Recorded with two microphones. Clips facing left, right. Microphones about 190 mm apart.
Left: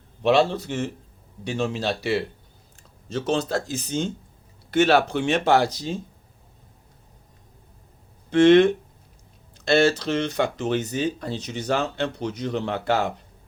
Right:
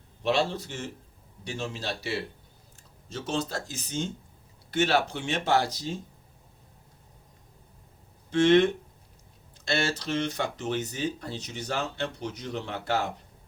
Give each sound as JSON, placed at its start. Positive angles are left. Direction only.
{"t": 0.2, "sound": "speech", "side_deg": 70}
{"t": 3.1, "sound": "speech", "side_deg": 90}
{"t": 4.7, "sound": "speech", "side_deg": 70}
{"t": 8.3, "sound": "speech", "side_deg": 75}